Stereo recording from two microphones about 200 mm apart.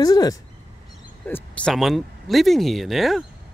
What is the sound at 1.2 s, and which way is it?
Speech, 5° left (ahead or behind).